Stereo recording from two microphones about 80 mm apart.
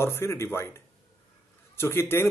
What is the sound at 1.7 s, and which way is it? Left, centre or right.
Speech, left.